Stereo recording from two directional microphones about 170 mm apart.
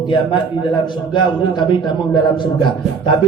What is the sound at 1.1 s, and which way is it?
A man's voice, 30° left (ahead or behind).